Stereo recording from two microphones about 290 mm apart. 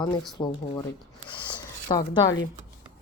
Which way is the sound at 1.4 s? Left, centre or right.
Centre.